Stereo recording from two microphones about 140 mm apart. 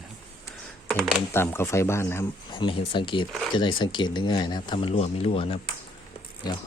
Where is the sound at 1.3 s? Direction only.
15° left (ahead or behind).